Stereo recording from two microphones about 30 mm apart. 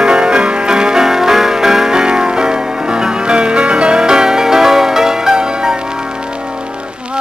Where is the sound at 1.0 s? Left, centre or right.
Centre.